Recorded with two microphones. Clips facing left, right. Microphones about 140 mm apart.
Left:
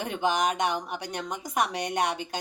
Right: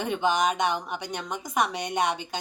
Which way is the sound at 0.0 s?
10° left (ahead or behind).